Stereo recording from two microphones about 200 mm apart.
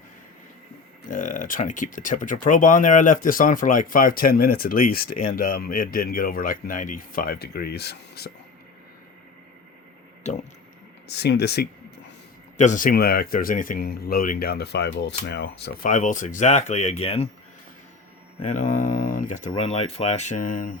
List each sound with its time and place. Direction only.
1.1 s speech: 40° left (ahead or behind)
10.3 s speech: 35° left (ahead or behind)
11.1 s speech: 55° left (ahead or behind)
12.5 s speech: 40° left (ahead or behind); by 15.9 s 55° left (ahead or behind)
15.9 s speech: 40° left (ahead or behind)
18.4 s speech: 40° left (ahead or behind)
19.5 s speech: 30° left (ahead or behind)